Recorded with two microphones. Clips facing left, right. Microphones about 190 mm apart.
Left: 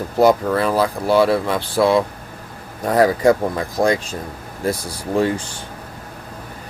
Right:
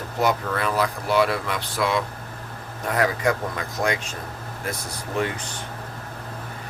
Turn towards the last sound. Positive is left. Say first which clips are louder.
# left 8 dB
turn(degrees=30)  # may be behind; listen again after turning